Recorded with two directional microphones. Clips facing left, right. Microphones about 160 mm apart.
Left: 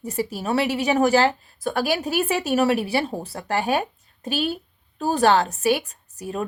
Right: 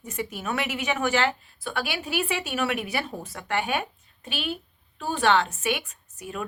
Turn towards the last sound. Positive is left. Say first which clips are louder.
# left 6 dB
turn(degrees=35)  # may be behind; listen again after turning